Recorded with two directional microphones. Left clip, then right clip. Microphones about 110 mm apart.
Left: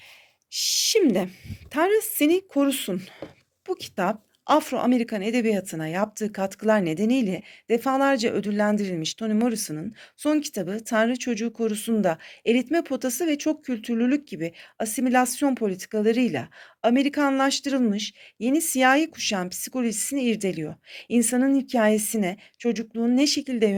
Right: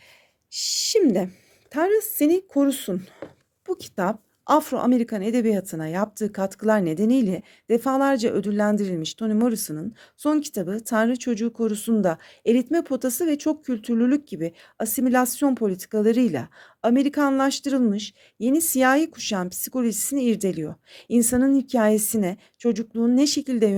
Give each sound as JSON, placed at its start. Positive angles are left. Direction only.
{"t": 0.5, "sound": "a woman's voice", "side_deg": -35}